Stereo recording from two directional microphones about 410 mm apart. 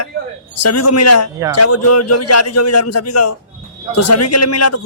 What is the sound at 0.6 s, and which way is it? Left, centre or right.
A man's voice, left.